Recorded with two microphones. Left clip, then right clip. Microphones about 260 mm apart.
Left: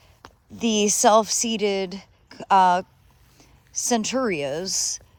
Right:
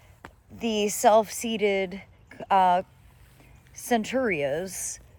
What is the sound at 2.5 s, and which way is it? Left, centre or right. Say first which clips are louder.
Speech: left 4 dB; left.